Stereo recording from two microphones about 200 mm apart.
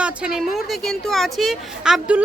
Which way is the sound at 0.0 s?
5° right (ahead or behind).